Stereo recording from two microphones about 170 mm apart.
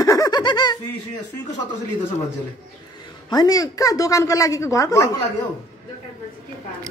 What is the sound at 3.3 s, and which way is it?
A woman's voice, 20° left (ahead or behind).